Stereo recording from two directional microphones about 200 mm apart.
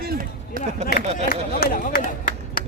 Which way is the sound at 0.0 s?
45° right (ahead or behind).